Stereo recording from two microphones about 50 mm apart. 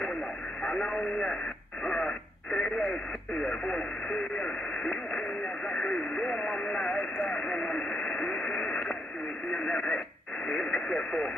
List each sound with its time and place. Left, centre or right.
0.7 s radio: centre